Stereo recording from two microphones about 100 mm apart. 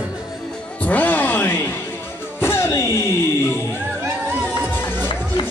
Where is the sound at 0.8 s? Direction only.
15° left (ahead or behind).